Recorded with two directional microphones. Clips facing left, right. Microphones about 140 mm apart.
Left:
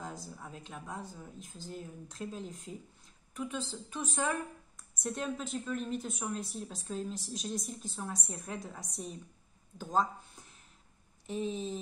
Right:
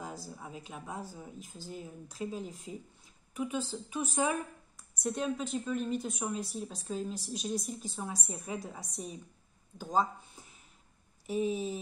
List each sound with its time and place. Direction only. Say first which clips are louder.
0.0 s a woman's voice: right 1 dB; 5° right (ahead or behind)